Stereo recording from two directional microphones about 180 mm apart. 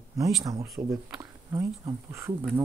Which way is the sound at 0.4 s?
20° right (ahead or behind).